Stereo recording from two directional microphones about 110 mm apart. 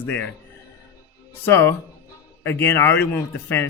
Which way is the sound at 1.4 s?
20° left (ahead or behind).